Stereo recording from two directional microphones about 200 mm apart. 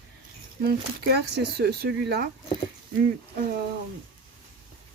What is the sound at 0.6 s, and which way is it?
Speech, 50° right (ahead or behind).